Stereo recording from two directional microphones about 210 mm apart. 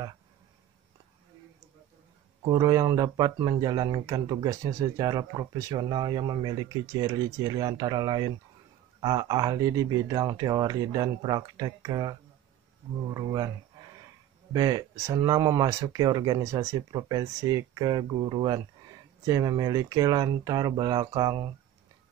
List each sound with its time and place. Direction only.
2.4 s speech: 20° right (ahead or behind)
14.5 s speech: 15° right (ahead or behind)